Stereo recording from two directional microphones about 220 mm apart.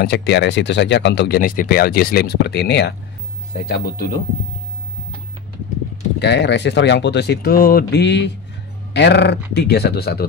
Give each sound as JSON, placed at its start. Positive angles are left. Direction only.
{"t": 0.0, "sound": "speech", "side_deg": 45}
{"t": 6.1, "sound": "speech", "side_deg": 50}